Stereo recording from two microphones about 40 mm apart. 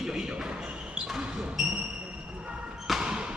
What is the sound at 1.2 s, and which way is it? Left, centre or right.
Basketball bounce, right.